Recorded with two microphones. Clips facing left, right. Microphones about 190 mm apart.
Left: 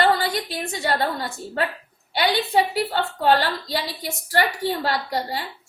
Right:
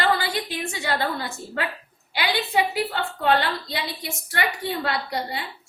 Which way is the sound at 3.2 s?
35° left (ahead or behind).